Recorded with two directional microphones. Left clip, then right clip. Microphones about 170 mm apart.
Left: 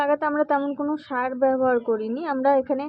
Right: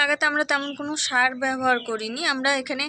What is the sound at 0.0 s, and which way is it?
A woman's voice, 35° left (ahead or behind).